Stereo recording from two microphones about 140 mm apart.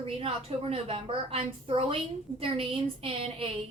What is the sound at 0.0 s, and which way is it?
A woman's voice, 45° right (ahead or behind).